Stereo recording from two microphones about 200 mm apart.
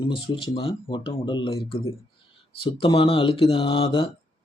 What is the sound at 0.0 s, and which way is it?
A man's voice, 25° left (ahead or behind).